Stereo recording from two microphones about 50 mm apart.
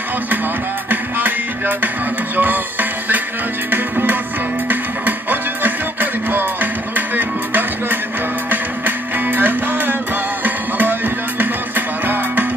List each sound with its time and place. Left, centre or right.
0.8 s music: right